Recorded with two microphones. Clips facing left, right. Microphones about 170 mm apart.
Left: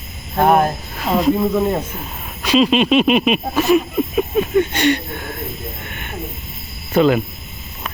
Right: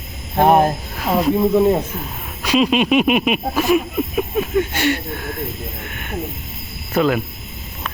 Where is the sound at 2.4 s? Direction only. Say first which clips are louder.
Left 2 dB; 10° right (ahead or behind).